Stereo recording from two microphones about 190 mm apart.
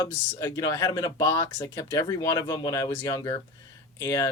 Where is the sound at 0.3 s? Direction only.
15° left (ahead or behind).